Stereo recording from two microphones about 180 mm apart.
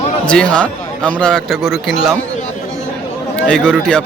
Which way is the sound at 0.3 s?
5° left (ahead or behind).